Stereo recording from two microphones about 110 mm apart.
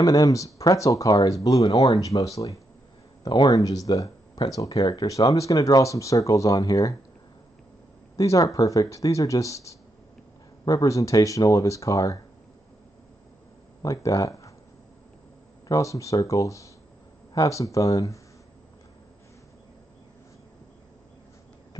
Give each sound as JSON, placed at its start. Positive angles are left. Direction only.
{"t": 0.0, "sound": "speech", "side_deg": 35}
{"t": 8.2, "sound": "speech", "side_deg": 30}
{"t": 13.8, "sound": "speech", "side_deg": 30}
{"t": 15.7, "sound": "speech", "side_deg": 30}